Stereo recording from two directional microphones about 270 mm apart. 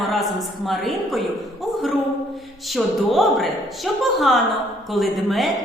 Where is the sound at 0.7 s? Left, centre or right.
Centre.